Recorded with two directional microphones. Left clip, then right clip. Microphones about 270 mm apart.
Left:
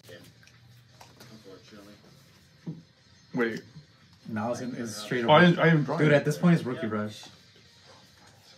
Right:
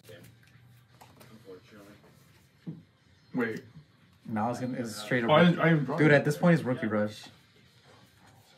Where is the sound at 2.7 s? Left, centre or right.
Left.